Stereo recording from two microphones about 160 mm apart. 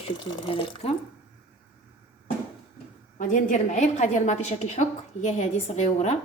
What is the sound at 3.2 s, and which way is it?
A woman's voice, 50° left (ahead or behind).